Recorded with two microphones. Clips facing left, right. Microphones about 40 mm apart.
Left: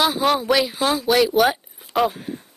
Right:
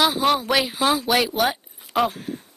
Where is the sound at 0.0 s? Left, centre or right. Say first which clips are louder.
Even; centre.